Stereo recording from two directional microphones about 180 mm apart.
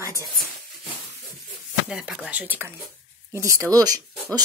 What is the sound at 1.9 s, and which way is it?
Speech, 5° right (ahead or behind).